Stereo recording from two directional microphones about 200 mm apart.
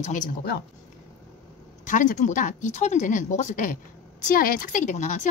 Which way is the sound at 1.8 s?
40° left (ahead or behind).